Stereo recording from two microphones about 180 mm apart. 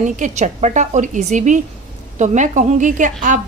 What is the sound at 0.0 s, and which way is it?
A woman's voice, 45° right (ahead or behind).